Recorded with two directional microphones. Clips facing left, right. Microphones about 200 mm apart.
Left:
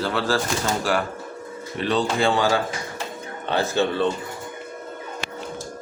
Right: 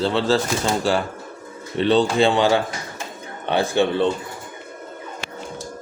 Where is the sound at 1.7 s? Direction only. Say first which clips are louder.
Right 5 dB; 30° right (ahead or behind).